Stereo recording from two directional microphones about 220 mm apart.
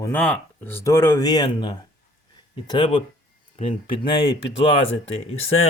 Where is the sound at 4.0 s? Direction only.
25° left (ahead or behind).